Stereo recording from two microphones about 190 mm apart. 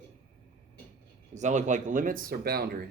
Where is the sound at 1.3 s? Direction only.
40° right (ahead or behind); by 2.6 s 55° right (ahead or behind).